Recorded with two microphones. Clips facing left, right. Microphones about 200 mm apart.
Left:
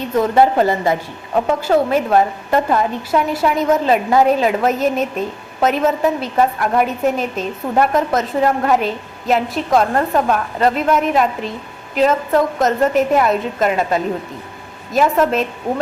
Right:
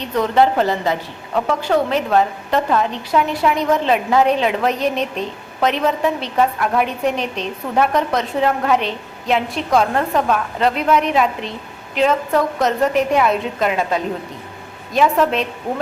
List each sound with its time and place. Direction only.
0.5 s a woman's voice: 10° left (ahead or behind)